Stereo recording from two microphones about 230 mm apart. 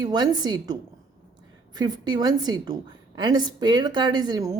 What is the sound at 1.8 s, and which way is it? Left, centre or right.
A woman's voice, centre.